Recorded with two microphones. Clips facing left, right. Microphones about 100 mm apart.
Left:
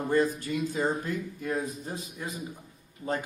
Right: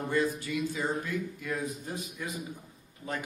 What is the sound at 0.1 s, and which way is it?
A man's voice, 40° left (ahead or behind).